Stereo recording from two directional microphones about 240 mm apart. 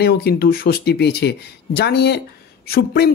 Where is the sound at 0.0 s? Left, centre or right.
Left.